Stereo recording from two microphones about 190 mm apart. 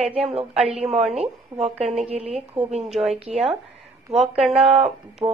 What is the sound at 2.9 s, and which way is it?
Speech, centre (ahead or behind).